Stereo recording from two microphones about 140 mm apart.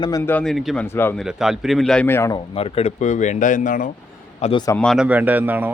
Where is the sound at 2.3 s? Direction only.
40° left (ahead or behind); by 3.9 s 70° left (ahead or behind).